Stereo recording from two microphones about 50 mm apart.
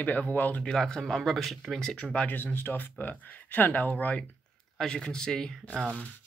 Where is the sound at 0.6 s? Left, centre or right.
Centre.